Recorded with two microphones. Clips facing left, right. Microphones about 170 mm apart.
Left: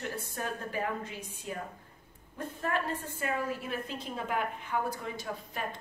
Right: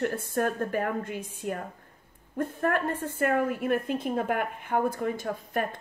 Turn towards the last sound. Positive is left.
turn(degrees=-55)  # may be behind; listen again after turning